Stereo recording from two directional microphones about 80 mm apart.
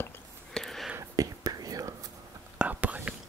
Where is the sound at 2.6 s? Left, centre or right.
Centre.